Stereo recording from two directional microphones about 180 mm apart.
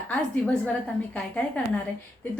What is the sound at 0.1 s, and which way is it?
A woman's voice, 10° left (ahead or behind).